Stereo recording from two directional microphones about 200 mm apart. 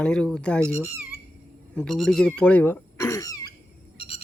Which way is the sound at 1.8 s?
Centre (ahead or behind).